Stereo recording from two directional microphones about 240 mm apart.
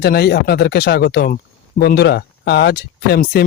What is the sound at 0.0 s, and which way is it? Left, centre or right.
Speech, left.